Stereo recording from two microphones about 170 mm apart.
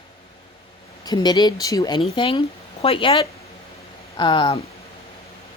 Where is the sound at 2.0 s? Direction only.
30° left (ahead or behind).